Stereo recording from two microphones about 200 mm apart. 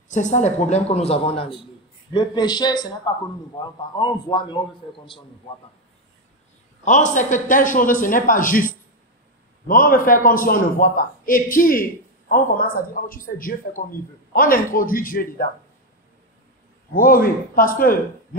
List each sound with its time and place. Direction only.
0.1 s a man's voice: 35° left (ahead or behind); by 2.9 s 20° left (ahead or behind)
3.9 s a man's voice: 20° left (ahead or behind)
6.8 s a man's voice: 40° left (ahead or behind)
16.9 s a man's voice: 45° left (ahead or behind)